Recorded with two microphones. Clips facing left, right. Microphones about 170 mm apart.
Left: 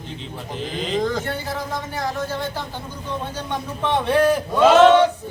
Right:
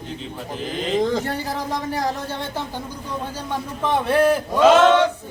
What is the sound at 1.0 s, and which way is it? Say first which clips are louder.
Speech: right 2 dB; 20° right (ahead or behind).